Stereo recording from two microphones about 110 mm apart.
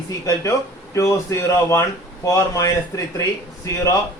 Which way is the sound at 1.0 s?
25° left (ahead or behind).